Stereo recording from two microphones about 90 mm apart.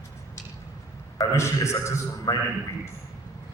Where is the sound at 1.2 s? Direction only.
35° left (ahead or behind).